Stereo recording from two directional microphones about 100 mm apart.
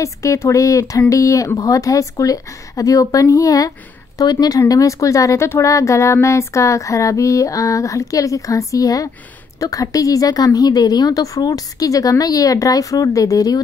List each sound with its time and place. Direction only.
0.0 s a woman's voice: 30° left (ahead or behind)